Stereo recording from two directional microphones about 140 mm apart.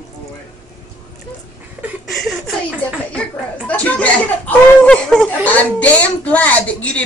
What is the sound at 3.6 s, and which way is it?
Speech, 10° left (ahead or behind).